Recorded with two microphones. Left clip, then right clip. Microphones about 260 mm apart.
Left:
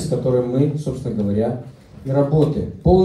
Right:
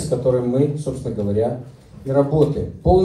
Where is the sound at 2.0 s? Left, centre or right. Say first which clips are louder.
Right 1 dB; right.